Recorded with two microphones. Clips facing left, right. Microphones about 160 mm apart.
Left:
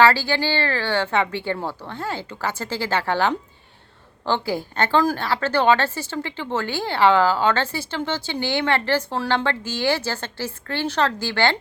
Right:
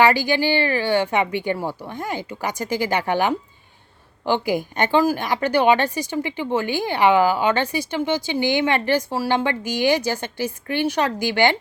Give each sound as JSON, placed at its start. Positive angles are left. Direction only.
{"t": 0.0, "sound": "a woman's voice", "side_deg": -15}